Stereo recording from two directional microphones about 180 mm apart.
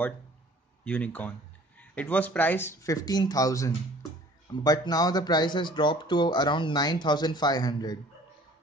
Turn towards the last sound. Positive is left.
turn(degrees=20)  # may be behind; listen again after turning